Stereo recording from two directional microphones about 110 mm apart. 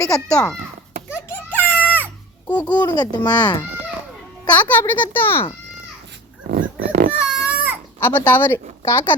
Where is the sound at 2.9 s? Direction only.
40° left (ahead or behind).